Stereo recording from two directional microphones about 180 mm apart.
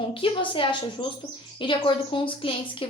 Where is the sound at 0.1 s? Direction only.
30° left (ahead or behind).